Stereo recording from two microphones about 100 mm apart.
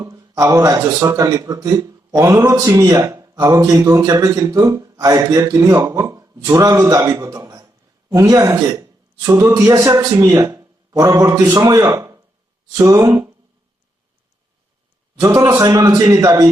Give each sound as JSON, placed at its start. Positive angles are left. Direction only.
{"t": 0.0, "sound": "a man's voice", "side_deg": -30}
{"t": 15.2, "sound": "speech", "side_deg": -30}